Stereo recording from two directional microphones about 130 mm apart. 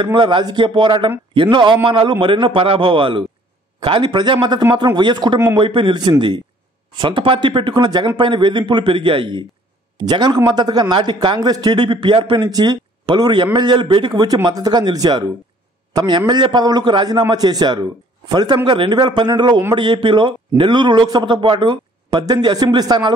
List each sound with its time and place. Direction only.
0.0 s a man's voice: 40° right (ahead or behind)